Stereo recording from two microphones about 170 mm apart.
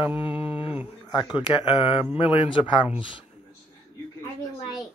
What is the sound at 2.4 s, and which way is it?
Speech, 30° left (ahead or behind).